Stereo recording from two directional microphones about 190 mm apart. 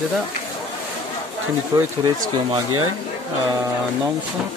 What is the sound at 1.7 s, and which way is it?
Speech, 20° right (ahead or behind).